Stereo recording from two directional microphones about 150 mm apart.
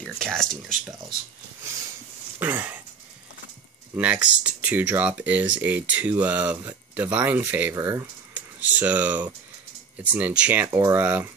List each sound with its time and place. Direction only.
0.0 s speech: 5° left (ahead or behind)
2.3 s a sound: 15° right (ahead or behind)
3.9 s speech: 10° right (ahead or behind)
8.4 s speech: 10° right (ahead or behind)